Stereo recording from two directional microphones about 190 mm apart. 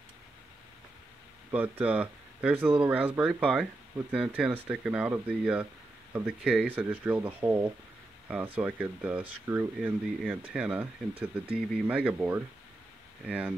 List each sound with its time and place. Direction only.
1.5 s speech: 10° right (ahead or behind)
6.7 s speech: 10° right (ahead or behind)